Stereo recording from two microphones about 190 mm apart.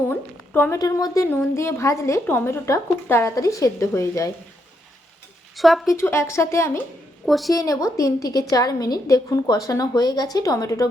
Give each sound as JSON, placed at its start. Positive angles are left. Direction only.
{"t": 0.1, "sound": "a woman's voice", "side_deg": 10}
{"t": 5.5, "sound": "speech", "side_deg": 0}
{"t": 5.9, "sound": "a woman's voice", "side_deg": 15}
{"t": 7.3, "sound": "a woman's voice", "side_deg": 0}
{"t": 7.5, "sound": "a woman's voice", "side_deg": 20}